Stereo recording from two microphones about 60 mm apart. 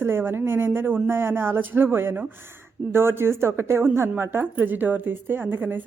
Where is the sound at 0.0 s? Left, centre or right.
Right.